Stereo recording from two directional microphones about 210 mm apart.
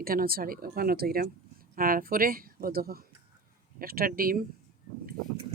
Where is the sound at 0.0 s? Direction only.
45° right (ahead or behind).